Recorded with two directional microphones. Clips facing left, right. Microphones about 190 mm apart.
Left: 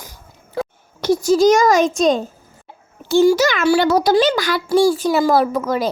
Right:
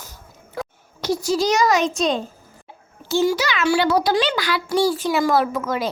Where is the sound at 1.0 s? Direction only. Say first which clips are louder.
Left 7 dB; 50° left (ahead or behind).